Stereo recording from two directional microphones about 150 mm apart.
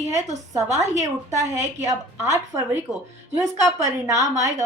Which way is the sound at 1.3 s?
20° right (ahead or behind).